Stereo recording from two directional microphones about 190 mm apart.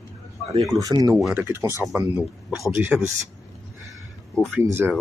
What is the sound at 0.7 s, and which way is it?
Speech, 20° right (ahead or behind).